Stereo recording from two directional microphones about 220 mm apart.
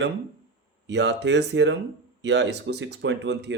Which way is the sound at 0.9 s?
55° right (ahead or behind).